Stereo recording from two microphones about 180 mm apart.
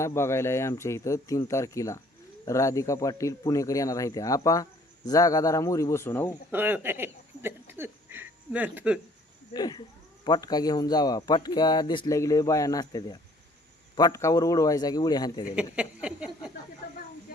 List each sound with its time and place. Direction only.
0.0 s a man's voice: 15° left (ahead or behind)
6.5 s speech: 10° right (ahead or behind)
9.5 s a man's voice: 20° left (ahead or behind)
15.4 s a sound: 5° right (ahead or behind)